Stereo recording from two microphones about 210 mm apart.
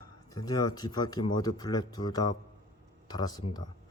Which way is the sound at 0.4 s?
20° left (ahead or behind).